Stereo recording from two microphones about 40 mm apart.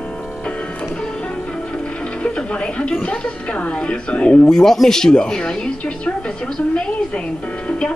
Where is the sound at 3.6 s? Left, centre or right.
Left.